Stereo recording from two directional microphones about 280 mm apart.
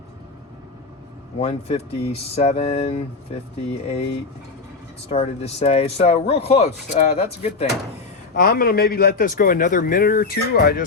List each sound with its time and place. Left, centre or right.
1.4 s speech: left
5.0 s speech: left
8.4 s speech: left